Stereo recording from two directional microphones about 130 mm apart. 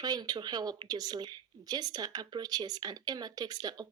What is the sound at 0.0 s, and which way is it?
Speech, 30° right (ahead or behind).